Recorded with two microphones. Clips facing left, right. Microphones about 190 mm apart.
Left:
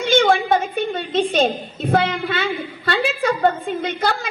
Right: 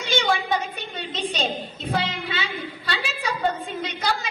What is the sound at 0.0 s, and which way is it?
A woman's voice, 55° left (ahead or behind).